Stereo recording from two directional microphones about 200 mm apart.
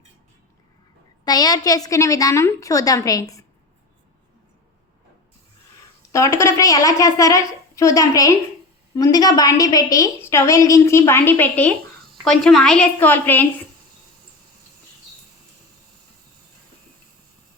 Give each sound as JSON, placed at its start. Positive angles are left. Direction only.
{"t": 1.2, "sound": "a woman's voice", "side_deg": 20}
{"t": 6.1, "sound": "a woman's voice", "side_deg": 15}